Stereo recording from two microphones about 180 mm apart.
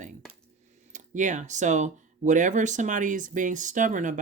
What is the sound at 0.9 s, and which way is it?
Speech, 45° right (ahead or behind).